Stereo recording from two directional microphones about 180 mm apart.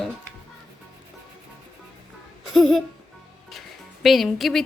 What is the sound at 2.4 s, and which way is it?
Music, centre (ahead or behind).